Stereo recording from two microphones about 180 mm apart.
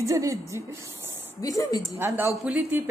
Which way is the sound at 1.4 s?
20° left (ahead or behind).